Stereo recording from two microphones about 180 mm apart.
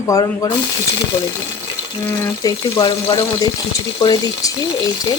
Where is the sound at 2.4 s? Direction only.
25° left (ahead or behind).